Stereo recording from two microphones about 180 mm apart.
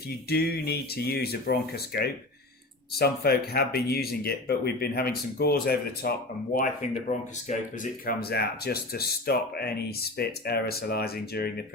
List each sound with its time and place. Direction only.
0.3 s speech: 60° left (ahead or behind)
7.1 s speech: 45° left (ahead or behind); by 11.6 s 60° left (ahead or behind)